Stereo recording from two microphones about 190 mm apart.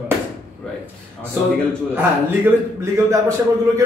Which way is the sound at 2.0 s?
10° right (ahead or behind).